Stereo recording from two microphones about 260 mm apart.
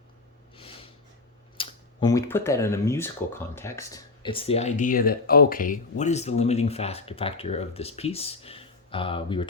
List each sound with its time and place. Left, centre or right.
0.5 s snort: left
1.5 s speech: centre